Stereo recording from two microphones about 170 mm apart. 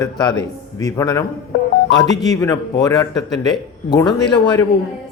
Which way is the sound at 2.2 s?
20° left (ahead or behind).